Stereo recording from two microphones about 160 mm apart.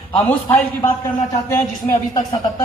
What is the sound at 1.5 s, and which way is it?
Speech, 20° left (ahead or behind).